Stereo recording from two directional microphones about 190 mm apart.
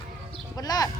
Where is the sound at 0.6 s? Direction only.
20° left (ahead or behind).